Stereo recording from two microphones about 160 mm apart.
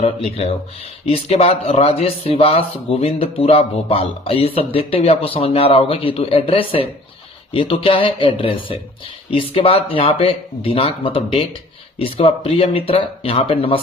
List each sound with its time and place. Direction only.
0.3 s speech: 40° left (ahead or behind)